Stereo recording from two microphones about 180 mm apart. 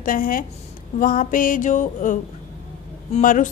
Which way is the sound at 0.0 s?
50° left (ahead or behind).